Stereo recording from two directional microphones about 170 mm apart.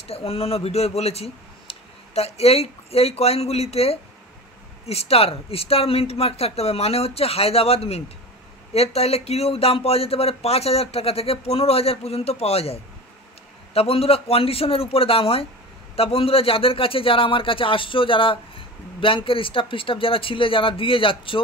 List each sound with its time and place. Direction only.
0.0 s speech: 35° left (ahead or behind)